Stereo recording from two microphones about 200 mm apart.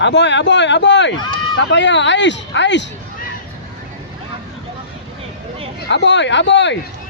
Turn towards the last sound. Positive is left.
turn(degrees=60)  # may be behind; listen again after turning